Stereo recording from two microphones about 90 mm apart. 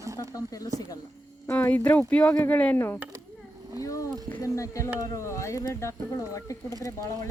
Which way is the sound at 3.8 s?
40° left (ahead or behind).